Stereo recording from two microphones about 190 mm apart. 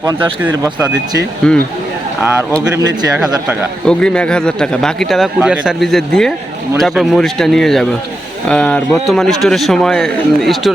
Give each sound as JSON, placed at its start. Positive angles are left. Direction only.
{"t": 0.4, "sound": "speech", "side_deg": -20}
{"t": 1.4, "sound": "a man's voice", "side_deg": 5}
{"t": 2.7, "sound": "speech", "side_deg": -20}
{"t": 3.8, "sound": "a man's voice", "side_deg": 5}